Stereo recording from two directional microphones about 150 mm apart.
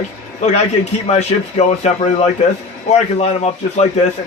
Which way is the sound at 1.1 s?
50° left (ahead or behind).